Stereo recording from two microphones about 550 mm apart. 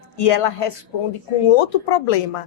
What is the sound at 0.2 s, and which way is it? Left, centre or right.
Speech, left.